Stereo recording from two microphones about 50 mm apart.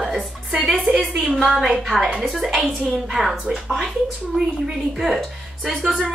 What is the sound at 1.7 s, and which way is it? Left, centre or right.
Speech, centre.